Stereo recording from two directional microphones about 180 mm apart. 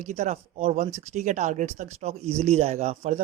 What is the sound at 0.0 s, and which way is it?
Speech, 40° right (ahead or behind).